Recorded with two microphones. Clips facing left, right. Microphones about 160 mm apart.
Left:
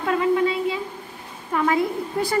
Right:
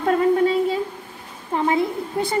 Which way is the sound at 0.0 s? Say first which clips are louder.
Right 3 dB; 40° right (ahead or behind).